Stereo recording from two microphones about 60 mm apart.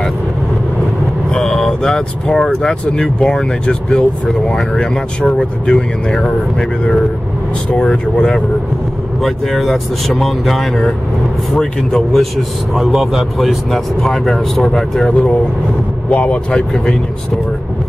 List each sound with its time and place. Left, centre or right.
1.3 s speech: centre
7.7 s speech: centre
9.2 s speech: centre
12.7 s speech: centre
16.1 s speech: left; by 17.4 s centre